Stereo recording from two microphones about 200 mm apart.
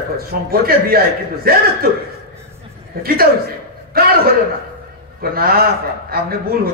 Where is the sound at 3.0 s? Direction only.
50° right (ahead or behind).